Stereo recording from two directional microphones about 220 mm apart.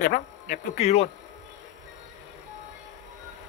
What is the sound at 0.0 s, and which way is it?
Speech, 35° left (ahead or behind).